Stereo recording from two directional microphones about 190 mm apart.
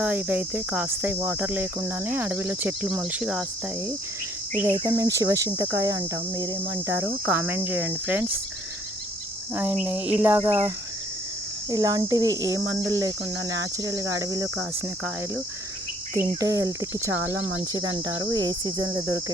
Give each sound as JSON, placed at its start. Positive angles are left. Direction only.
{"t": 0.0, "sound": "cricket", "side_deg": -10}
{"t": 4.7, "sound": "cricket", "side_deg": -20}
{"t": 9.6, "sound": "cricket", "side_deg": -5}
{"t": 11.7, "sound": "speech", "side_deg": -20}
{"t": 13.7, "sound": "cricket", "side_deg": -15}
{"t": 16.1, "sound": "cricket", "side_deg": -20}
{"t": 17.8, "sound": "speech", "side_deg": -20}